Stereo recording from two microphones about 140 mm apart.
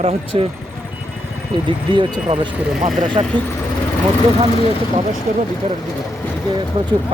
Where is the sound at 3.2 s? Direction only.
45° right (ahead or behind).